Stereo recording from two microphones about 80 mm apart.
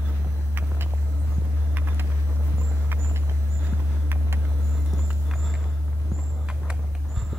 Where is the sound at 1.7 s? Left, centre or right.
Right.